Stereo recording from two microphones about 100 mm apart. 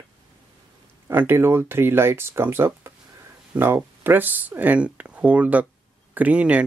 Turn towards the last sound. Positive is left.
turn(degrees=-15)  # may be behind; listen again after turning